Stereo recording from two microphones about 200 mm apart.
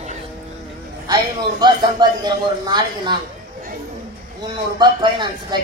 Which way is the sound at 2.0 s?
20° right (ahead or behind).